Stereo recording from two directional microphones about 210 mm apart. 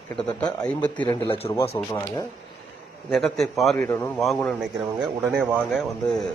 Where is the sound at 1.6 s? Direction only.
30° left (ahead or behind).